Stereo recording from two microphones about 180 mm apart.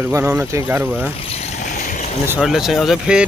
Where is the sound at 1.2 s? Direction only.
35° left (ahead or behind).